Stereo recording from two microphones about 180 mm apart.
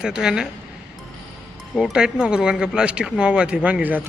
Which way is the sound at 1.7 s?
Centre (ahead or behind).